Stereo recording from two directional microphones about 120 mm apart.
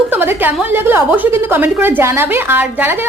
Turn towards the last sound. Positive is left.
turn(degrees=-20)  # may be behind; listen again after turning